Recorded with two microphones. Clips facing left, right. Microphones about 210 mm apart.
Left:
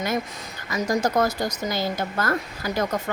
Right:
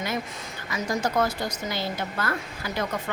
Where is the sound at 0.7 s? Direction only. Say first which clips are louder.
Left 4 dB; 40° left (ahead or behind).